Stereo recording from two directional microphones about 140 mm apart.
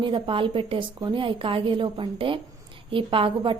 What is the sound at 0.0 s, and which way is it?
A woman's voice, 35° right (ahead or behind).